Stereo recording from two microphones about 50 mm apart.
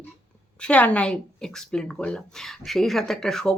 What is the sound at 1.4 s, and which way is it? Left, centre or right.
A woman's voice, centre.